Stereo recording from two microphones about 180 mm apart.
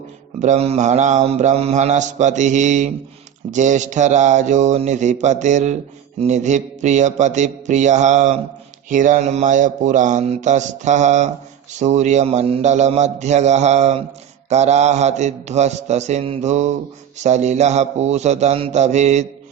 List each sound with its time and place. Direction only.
0.3 s mantra: 40° right (ahead or behind)
8.9 s a sound: 45° right (ahead or behind)
11.8 s mantra: 40° right (ahead or behind)